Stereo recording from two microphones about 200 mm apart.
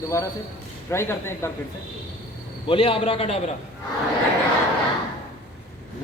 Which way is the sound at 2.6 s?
25° left (ahead or behind).